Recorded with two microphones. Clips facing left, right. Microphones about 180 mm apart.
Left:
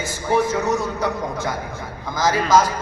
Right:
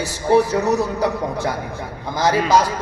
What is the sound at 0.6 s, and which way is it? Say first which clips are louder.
Speech: right 3 dB; centre (ahead or behind).